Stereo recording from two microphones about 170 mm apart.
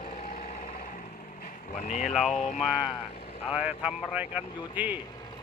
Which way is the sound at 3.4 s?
5° right (ahead or behind).